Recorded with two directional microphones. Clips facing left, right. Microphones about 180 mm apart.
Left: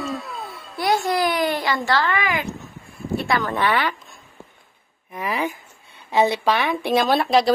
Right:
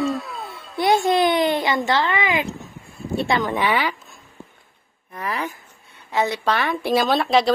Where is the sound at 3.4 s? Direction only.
15° right (ahead or behind).